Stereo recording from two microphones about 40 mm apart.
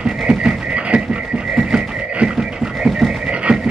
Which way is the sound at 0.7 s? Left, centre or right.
Right.